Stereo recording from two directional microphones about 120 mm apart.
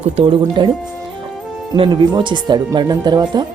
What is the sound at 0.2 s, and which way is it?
Speech, 45° right (ahead or behind).